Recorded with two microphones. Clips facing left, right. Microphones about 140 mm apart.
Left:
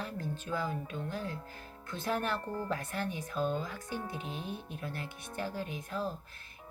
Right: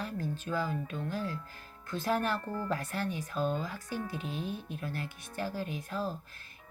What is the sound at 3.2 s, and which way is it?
Speech, 20° left (ahead or behind).